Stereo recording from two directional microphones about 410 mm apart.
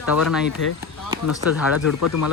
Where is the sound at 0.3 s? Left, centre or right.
Centre.